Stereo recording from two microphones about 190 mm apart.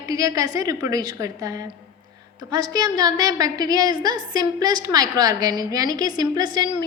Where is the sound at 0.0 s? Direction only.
20° right (ahead or behind).